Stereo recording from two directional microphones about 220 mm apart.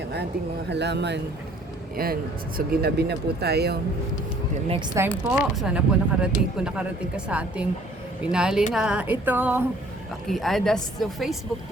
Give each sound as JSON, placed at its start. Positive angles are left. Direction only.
{"t": 0.7, "sound": "speech", "side_deg": -50}
{"t": 4.9, "sound": "speech", "side_deg": -10}